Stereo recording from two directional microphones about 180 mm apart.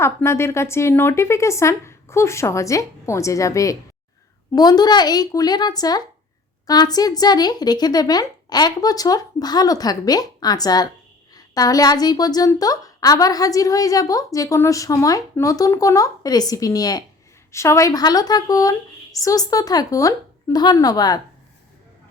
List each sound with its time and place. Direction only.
0.0 s a woman's voice: 15° left (ahead or behind)